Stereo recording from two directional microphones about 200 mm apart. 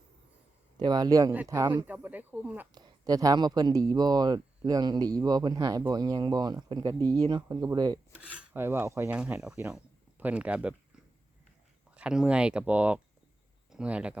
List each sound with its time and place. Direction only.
0.8 s speech: 20° right (ahead or behind)
1.3 s filing: 10° right (ahead or behind)
1.9 s filing: 10° right (ahead or behind)
2.7 s speech: 20° right (ahead or behind)
7.0 s speech: 10° left (ahead or behind)
7.3 s speech: 20° right (ahead or behind)
8.1 s filing: 10° right (ahead or behind)
9.6 s speech: 5° right (ahead or behind)
11.9 s speech: 5° right (ahead or behind)